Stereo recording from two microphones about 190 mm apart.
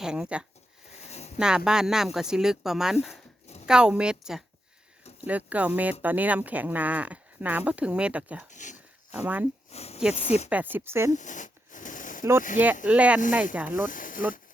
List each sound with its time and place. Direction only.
0.0 s speech: 5° right (ahead or behind)
0.9 s a sound: 35° left (ahead or behind)
1.4 s speech: 5° right (ahead or behind)
8.4 s speech: 40° left (ahead or behind)
9.1 s speech: 10° right (ahead or behind)
9.7 s speech: 35° left (ahead or behind)
10.5 s speech: 10° right (ahead or behind)
11.1 s a sound: 40° left (ahead or behind)
12.2 s speech: 15° right (ahead or behind)
13.9 s a sound: 45° left (ahead or behind)